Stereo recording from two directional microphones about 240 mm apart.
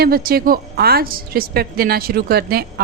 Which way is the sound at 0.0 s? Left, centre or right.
Right.